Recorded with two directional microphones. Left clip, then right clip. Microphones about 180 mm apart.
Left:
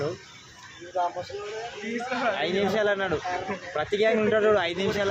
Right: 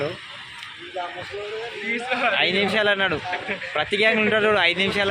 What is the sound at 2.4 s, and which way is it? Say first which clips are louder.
Speech: right 5 dB; 5° right (ahead or behind).